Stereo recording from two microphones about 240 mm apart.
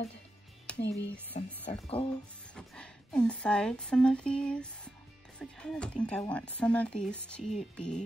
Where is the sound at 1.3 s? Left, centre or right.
Left.